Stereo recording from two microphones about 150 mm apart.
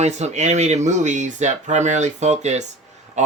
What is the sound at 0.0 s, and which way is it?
Speech, 50° right (ahead or behind).